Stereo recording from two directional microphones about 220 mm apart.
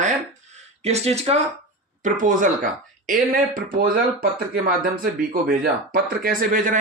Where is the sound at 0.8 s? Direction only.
30° right (ahead or behind).